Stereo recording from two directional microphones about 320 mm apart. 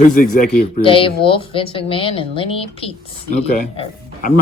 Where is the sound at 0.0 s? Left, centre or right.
Left.